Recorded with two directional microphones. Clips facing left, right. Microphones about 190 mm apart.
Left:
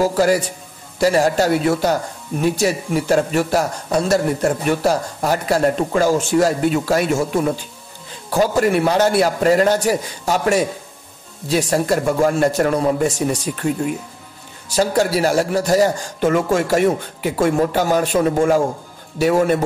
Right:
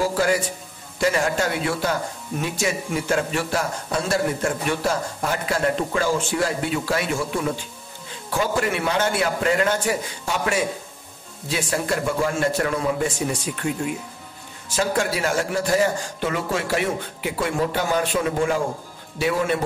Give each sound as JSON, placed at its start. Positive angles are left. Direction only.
{"t": 0.0, "sound": "speech", "side_deg": 40}
{"t": 8.3, "sound": "a man's voice", "side_deg": 40}